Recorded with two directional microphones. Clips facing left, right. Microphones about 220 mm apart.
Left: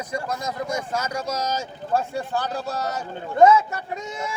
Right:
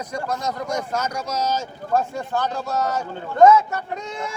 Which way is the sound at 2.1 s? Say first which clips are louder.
Right 1 dB; 35° left (ahead or behind).